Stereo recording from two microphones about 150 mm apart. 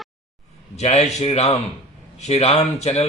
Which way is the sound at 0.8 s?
45° left (ahead or behind).